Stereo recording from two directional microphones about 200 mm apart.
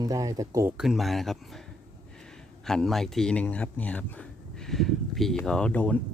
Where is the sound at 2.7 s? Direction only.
Centre (ahead or behind).